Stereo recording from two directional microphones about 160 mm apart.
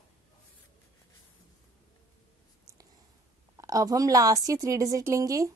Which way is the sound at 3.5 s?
20° right (ahead or behind).